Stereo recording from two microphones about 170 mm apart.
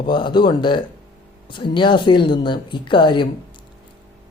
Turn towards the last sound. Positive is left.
turn(degrees=30)  # may be behind; listen again after turning